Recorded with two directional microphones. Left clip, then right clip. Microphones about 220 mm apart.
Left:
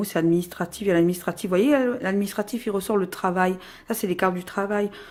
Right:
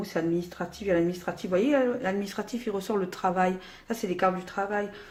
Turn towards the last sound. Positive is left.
turn(degrees=40)  # may be behind; listen again after turning